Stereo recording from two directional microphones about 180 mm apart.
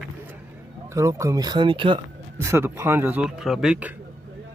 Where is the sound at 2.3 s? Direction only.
15° right (ahead or behind).